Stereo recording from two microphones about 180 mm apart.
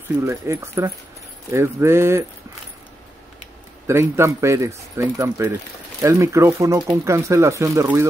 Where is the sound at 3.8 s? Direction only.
15° right (ahead or behind).